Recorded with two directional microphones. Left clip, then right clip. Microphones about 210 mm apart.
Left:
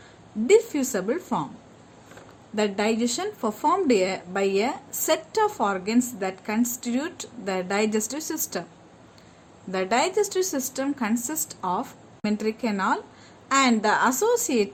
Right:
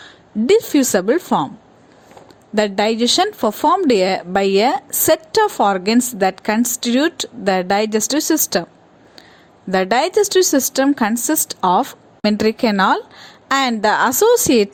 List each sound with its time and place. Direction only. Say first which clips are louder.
0.0 s speech: right 10 dB; 35° right (ahead or behind)
2.6 s speech: right 8 dB; 40° right (ahead or behind)
9.7 s speech: right 8 dB; 40° right (ahead or behind)